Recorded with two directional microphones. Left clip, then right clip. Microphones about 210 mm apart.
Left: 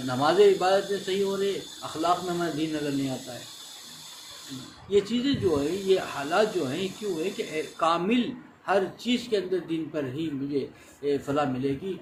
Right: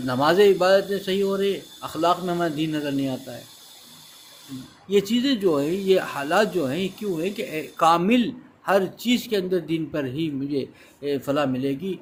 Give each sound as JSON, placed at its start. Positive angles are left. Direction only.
{"t": 0.1, "sound": "speech", "side_deg": -50}
{"t": 4.9, "sound": "a man's voice", "side_deg": -55}